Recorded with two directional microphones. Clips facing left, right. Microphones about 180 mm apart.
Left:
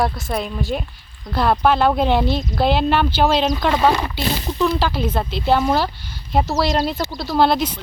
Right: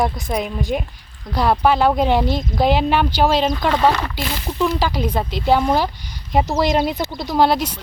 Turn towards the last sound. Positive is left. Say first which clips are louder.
# even
turn(degrees=-10)  # may be behind; listen again after turning